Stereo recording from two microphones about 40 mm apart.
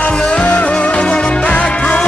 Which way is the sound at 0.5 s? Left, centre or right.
Left.